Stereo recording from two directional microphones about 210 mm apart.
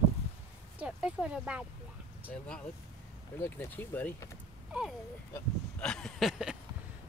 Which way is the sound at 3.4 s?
10° left (ahead or behind).